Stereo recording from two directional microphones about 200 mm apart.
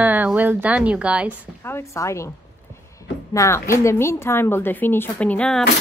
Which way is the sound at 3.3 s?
15° left (ahead or behind).